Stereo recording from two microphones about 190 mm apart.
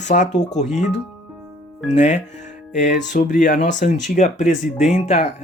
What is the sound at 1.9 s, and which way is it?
Speech, 40° left (ahead or behind).